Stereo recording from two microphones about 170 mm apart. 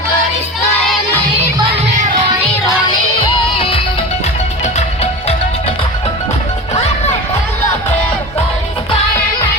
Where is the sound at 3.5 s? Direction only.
35° left (ahead or behind).